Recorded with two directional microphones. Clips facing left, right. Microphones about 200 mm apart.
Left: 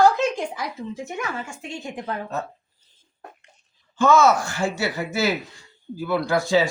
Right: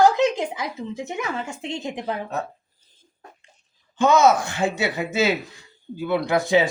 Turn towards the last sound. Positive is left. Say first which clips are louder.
# right 1 dB
turn(degrees=-20)  # may be behind; listen again after turning